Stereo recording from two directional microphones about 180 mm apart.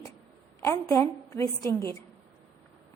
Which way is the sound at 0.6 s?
15° left (ahead or behind).